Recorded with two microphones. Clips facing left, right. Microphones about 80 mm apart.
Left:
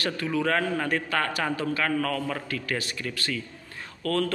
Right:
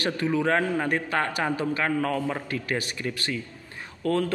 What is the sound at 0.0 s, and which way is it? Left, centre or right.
A man's voice, right.